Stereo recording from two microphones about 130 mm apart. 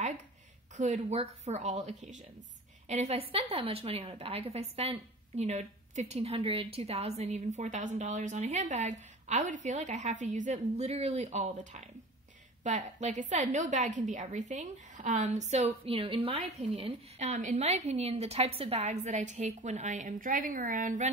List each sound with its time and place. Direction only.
0.7 s a woman's voice: 70° right (ahead or behind)
2.9 s a woman's voice: 55° right (ahead or behind); by 21.1 s 85° right